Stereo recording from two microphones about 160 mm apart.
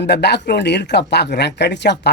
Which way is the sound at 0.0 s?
90° left.